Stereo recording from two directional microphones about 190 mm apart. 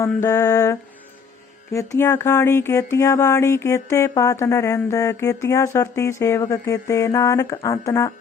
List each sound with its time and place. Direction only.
0.2 s speech: 15° left (ahead or behind)